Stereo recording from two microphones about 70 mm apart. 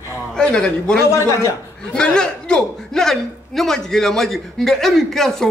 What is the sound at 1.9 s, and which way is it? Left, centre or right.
A man's voice, centre.